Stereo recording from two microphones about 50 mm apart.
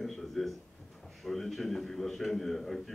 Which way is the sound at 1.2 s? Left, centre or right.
Centre.